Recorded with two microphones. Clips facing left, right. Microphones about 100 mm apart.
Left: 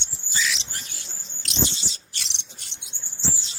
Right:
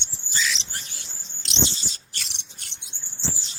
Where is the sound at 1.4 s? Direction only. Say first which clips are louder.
Even; 25° right (ahead or behind).